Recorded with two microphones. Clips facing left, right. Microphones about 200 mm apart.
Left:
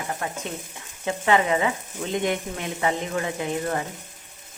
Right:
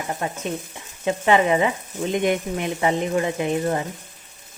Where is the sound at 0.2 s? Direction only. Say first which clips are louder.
Right 4 dB; 20° right (ahead or behind).